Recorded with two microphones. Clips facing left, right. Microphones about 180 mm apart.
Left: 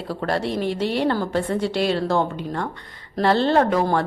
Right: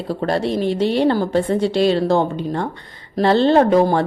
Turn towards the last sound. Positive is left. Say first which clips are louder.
# right 5 dB
turn(degrees=-25)  # may be behind; listen again after turning